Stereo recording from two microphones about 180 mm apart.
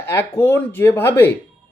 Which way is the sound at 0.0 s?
15° left (ahead or behind).